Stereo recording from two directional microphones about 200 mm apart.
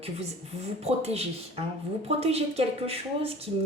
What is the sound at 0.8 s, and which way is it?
Speech, 30° right (ahead or behind).